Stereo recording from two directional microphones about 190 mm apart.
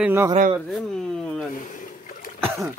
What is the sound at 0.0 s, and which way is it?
Speech, 10° right (ahead or behind).